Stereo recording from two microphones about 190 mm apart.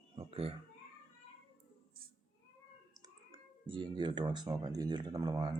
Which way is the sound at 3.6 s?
25° right (ahead or behind).